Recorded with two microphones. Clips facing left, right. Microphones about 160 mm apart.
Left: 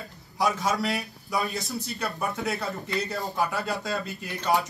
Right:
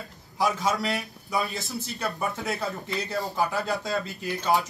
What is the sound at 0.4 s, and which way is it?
A man's voice, centre (ahead or behind).